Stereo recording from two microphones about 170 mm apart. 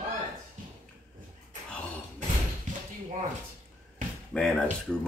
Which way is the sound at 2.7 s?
50° right (ahead or behind).